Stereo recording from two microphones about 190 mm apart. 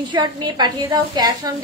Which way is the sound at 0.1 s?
20° right (ahead or behind).